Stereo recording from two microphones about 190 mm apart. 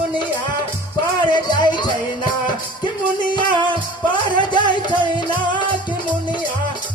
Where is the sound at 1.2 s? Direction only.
25° left (ahead or behind).